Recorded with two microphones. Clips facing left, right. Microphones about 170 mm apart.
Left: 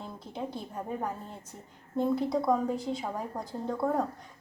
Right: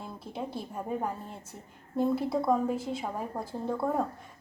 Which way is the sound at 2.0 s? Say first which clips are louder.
Even; 5° right (ahead or behind).